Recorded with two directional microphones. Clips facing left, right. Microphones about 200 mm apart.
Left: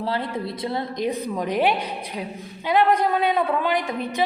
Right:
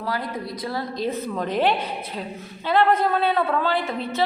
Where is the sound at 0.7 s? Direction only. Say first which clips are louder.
Even; 20° left (ahead or behind).